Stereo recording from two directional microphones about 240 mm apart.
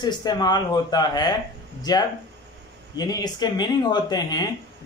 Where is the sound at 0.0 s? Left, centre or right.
Centre.